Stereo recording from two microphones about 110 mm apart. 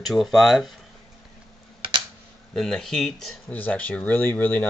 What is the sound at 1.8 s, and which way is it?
Typing, 50° right (ahead or behind).